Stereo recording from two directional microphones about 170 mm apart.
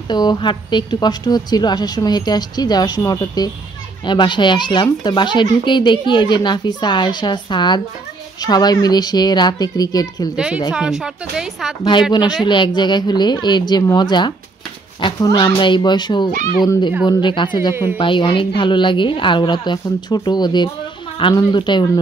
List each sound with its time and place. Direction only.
0.1 s a woman's voice: 25° left (ahead or behind)
10.3 s a woman's voice: 5° right (ahead or behind)
12.1 s a woman's voice: 25° left (ahead or behind)